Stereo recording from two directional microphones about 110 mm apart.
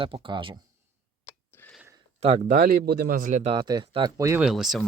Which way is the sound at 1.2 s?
15° left (ahead or behind).